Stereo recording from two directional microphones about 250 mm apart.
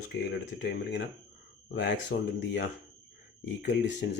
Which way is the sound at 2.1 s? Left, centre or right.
Left.